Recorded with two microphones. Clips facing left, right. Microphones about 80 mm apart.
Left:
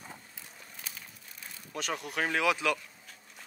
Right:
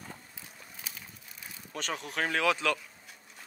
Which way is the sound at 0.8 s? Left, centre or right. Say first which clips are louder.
Right 1 dB; centre.